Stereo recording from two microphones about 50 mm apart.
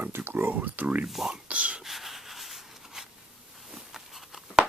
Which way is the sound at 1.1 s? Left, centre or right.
Centre.